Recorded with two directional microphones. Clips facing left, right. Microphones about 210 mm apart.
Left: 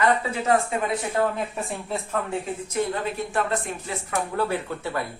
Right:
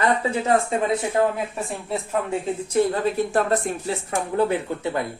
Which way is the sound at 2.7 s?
35° right (ahead or behind).